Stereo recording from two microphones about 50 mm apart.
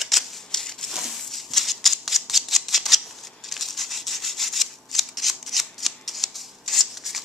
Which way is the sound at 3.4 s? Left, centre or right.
Centre.